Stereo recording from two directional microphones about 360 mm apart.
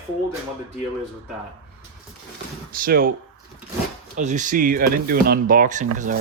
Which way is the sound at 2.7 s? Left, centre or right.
Right.